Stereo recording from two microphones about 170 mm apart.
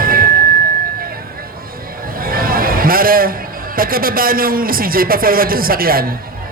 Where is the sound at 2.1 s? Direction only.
60° right (ahead or behind).